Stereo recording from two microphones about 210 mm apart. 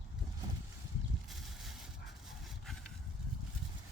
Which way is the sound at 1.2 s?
Centre (ahead or behind).